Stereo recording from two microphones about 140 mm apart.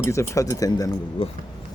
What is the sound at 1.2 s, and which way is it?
Speech, 40° left (ahead or behind).